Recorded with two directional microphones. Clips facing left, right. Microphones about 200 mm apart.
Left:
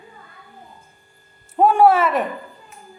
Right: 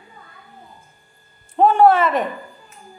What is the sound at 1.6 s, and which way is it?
Speech, 10° left (ahead or behind).